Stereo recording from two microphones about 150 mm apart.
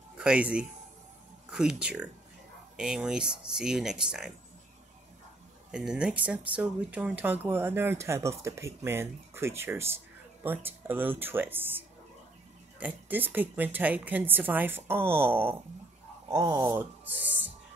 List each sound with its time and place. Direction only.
0.2 s speech: 10° right (ahead or behind)
5.7 s speech: 5° right (ahead or behind)
16.3 s speech: 25° right (ahead or behind)
16.6 s speech: 15° right (ahead or behind)